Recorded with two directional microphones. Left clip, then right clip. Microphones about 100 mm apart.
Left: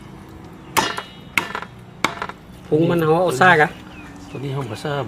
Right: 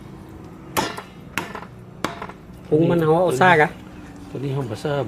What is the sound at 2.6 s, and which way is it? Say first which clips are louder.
Speech: left 1 dB; 5° right (ahead or behind).